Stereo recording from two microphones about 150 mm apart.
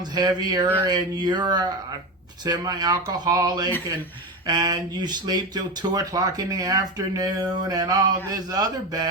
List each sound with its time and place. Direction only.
0.1 s speech: 25° right (ahead or behind)